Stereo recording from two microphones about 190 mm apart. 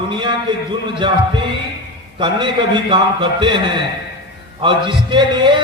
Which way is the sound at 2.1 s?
25° right (ahead or behind).